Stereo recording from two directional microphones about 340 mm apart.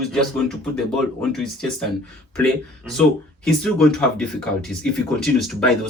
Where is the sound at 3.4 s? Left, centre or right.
Centre.